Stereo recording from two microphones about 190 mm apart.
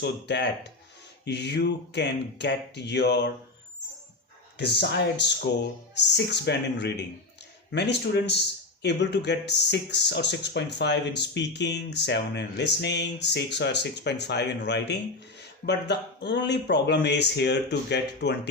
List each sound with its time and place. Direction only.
0.0 s speech: 65° left (ahead or behind)
4.5 s speech: 60° left (ahead or behind)